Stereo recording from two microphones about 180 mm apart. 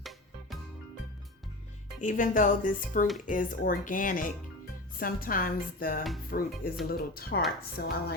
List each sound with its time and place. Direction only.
2.0 s speech: 45° left (ahead or behind)